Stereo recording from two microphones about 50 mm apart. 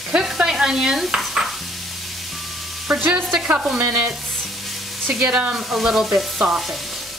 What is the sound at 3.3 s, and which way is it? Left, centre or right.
Stir, centre.